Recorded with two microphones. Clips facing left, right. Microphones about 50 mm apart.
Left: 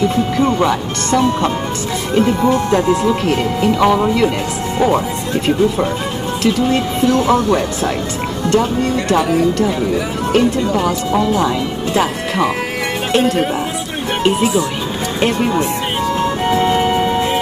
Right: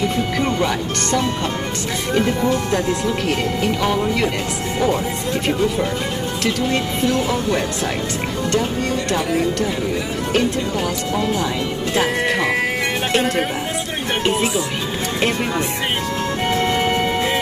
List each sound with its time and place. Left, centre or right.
2.4 s speech: left
3.8 s speech: left
16.4 s music: centre